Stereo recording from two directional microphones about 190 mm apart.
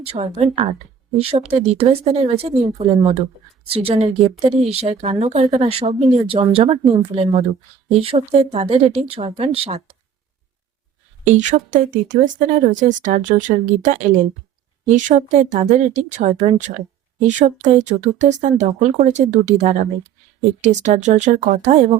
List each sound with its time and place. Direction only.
0.0 s speech: 30° right (ahead or behind)
11.3 s speech: 40° right (ahead or behind)